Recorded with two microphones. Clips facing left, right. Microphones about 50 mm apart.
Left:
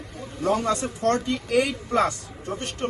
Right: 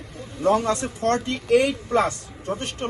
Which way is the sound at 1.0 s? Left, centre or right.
Right.